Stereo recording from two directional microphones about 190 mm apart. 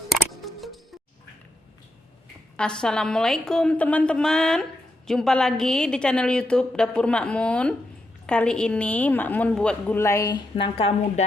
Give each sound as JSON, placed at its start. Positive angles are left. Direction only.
{"t": 0.1, "sound": "music", "side_deg": 0}
{"t": 2.6, "sound": "a woman's voice", "side_deg": 5}
{"t": 10.5, "sound": "a woman's voice", "side_deg": 30}